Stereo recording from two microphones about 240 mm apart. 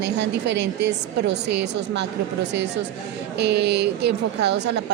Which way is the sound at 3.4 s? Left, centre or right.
Right.